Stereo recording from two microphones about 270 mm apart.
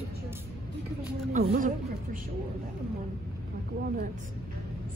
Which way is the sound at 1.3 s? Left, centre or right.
Right.